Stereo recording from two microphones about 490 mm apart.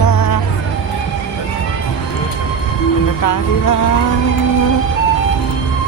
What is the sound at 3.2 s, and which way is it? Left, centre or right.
Music, left.